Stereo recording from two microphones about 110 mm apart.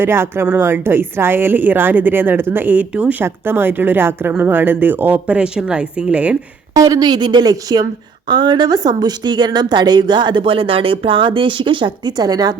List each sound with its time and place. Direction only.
0.0 s a woman's voice: 20° right (ahead or behind)
6.7 s a woman's voice: 35° right (ahead or behind)